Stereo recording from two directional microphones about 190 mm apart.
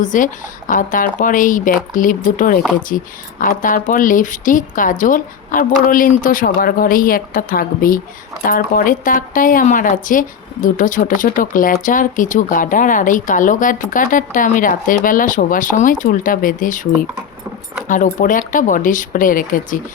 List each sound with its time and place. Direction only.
0.0 s speech: 40° left (ahead or behind)